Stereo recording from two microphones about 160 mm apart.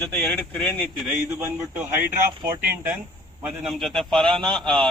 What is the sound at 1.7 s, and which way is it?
Speech, 10° right (ahead or behind).